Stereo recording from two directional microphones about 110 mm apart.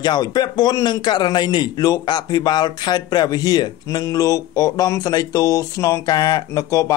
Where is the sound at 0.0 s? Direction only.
40° left (ahead or behind).